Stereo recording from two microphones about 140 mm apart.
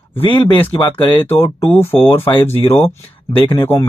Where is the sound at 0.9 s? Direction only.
10° left (ahead or behind).